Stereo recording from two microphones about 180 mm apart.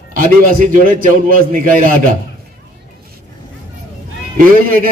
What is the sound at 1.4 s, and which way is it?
Speech, 50° right (ahead or behind).